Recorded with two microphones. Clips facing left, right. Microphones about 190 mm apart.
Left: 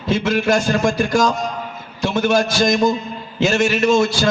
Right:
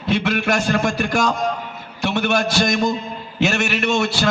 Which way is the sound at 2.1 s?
65° right (ahead or behind).